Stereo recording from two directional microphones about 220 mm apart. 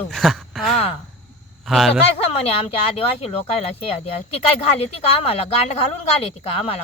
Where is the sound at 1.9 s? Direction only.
25° left (ahead or behind).